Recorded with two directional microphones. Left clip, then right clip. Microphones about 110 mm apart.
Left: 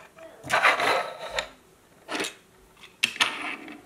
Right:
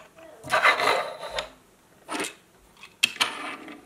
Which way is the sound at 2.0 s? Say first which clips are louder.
Left 1 dB; 25° right (ahead or behind).